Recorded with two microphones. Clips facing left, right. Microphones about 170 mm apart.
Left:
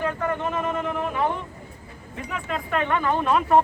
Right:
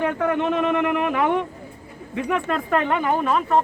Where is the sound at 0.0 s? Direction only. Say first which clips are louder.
Right 4 dB; 70° right (ahead or behind).